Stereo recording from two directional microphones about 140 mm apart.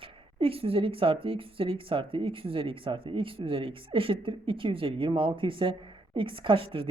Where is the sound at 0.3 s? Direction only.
40° right (ahead or behind).